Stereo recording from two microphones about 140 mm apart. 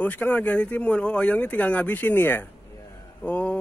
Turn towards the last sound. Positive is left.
turn(degrees=10)  # may be behind; listen again after turning